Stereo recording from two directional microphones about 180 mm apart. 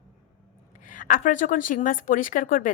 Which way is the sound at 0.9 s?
45° left (ahead or behind).